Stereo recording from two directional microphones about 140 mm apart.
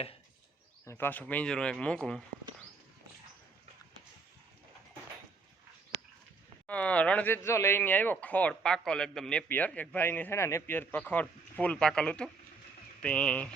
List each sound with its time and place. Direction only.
0.9 s a man's voice: 15° left (ahead or behind)
6.7 s a man's voice: 10° left (ahead or behind)